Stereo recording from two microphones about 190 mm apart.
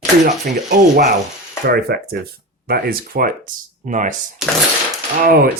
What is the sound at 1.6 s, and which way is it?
Speech, 55° right (ahead or behind).